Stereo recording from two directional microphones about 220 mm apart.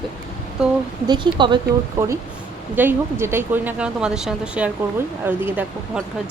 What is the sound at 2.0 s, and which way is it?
Speech, 10° right (ahead or behind).